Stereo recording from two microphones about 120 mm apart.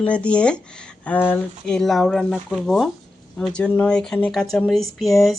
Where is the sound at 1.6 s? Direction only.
5° left (ahead or behind).